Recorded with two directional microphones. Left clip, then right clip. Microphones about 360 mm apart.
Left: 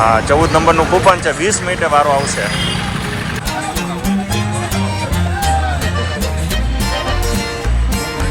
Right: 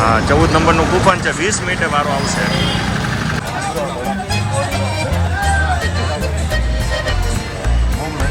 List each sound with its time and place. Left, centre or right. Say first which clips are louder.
0.0 s speech: left 2 dB; centre